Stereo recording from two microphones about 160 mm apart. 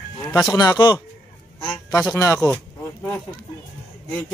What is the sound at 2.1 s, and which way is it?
Speech, 15° left (ahead or behind).